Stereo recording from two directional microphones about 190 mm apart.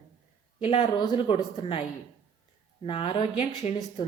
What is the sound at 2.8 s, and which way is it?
Speech, 30° left (ahead or behind).